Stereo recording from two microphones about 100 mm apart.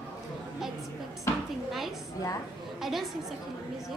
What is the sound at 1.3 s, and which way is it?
Dishes, 25° left (ahead or behind).